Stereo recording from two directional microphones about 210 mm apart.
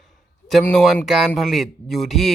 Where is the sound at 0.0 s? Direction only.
Centre (ahead or behind).